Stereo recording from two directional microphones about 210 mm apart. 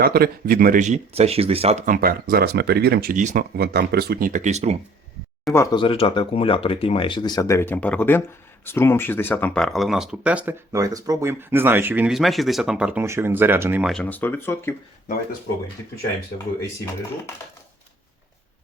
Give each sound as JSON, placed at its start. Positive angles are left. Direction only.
{"t": 0.0, "sound": "speech", "side_deg": -45}
{"t": 5.5, "sound": "speech", "side_deg": 25}
{"t": 13.9, "sound": "speech", "side_deg": 5}
{"t": 16.6, "sound": "speech", "side_deg": 10}